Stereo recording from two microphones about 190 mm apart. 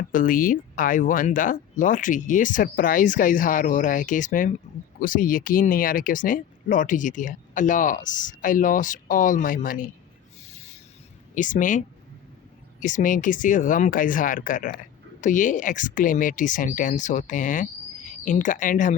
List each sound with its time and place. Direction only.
0.1 s speech: 45° left (ahead or behind)
10.5 s a sound: 35° left (ahead or behind)
11.3 s speech: 40° left (ahead or behind)
12.8 s speech: 45° left (ahead or behind)